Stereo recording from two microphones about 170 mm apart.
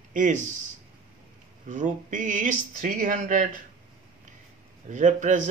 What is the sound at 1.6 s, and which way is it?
Speech, 50° right (ahead or behind).